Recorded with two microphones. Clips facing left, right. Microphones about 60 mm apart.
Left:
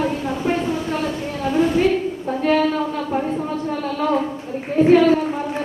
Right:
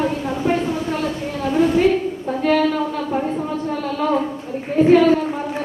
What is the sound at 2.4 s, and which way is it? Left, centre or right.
A woman's voice, centre.